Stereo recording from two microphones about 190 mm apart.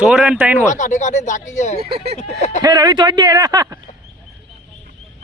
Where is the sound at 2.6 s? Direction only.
20° right (ahead or behind).